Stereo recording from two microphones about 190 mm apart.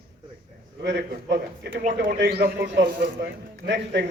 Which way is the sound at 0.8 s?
65° right (ahead or behind).